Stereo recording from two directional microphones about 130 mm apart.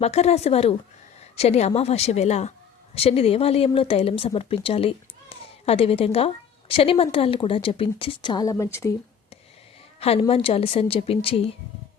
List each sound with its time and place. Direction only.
0.0 s a woman's voice: 55° left (ahead or behind); by 9.0 s 25° left (ahead or behind)
10.0 s speech: 50° left (ahead or behind)